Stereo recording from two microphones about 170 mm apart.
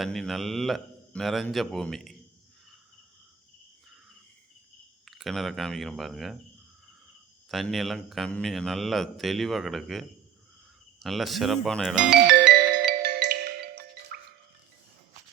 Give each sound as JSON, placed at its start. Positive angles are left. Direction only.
{"t": 0.0, "sound": "a man's voice", "side_deg": 0}
{"t": 5.0, "sound": "a man's voice", "side_deg": 0}
{"t": 7.4, "sound": "a man's voice", "side_deg": 0}
{"t": 12.8, "sound": "marimba", "side_deg": -70}